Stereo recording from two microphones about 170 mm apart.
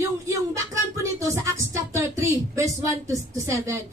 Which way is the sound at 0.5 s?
20° right (ahead or behind).